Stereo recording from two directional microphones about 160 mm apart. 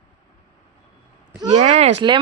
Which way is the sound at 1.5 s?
45° right (ahead or behind).